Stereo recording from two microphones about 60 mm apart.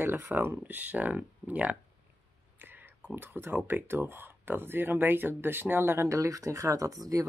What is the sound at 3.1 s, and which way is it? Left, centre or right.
Speech, right.